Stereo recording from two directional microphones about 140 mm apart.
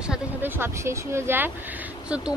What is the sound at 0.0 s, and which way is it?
A woman's voice, 10° right (ahead or behind).